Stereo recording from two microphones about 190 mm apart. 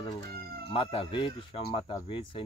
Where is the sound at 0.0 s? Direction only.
20° left (ahead or behind).